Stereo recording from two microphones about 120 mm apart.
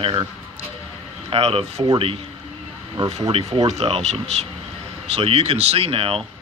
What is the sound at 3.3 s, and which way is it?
Speech, 50° right (ahead or behind).